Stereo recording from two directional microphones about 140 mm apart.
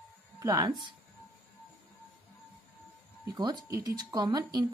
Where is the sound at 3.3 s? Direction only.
25° right (ahead or behind).